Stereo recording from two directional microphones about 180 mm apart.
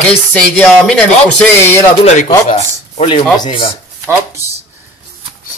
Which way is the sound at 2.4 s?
35° left (ahead or behind).